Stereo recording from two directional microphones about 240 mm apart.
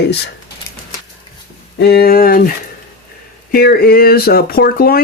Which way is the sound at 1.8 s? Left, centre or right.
Left.